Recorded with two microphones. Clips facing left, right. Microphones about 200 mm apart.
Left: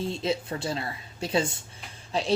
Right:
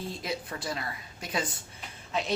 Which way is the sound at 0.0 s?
25° left (ahead or behind).